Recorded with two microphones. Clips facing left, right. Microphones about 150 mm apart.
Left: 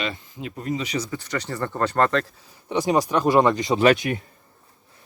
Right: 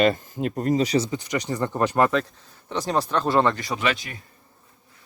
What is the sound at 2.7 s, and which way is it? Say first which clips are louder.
Speech: left 3 dB; 10° left (ahead or behind).